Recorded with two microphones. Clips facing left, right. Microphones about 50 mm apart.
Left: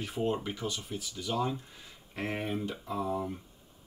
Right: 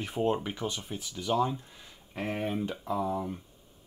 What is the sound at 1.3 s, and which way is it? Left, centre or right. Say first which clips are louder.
Speech: right 5 dB; centre.